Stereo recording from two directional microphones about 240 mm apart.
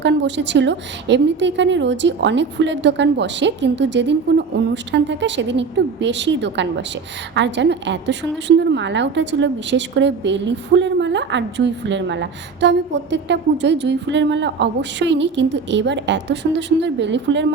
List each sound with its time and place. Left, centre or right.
0.0 s a woman's voice: right